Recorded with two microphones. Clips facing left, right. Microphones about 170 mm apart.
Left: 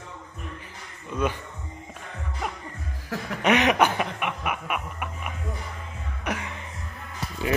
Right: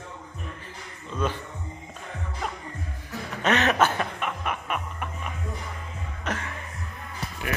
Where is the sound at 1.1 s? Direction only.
10° left (ahead or behind).